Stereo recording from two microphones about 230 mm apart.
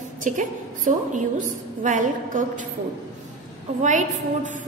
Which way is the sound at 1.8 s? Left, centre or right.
Right.